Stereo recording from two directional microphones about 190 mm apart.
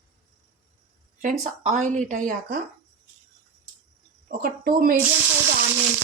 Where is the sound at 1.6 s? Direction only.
40° right (ahead or behind).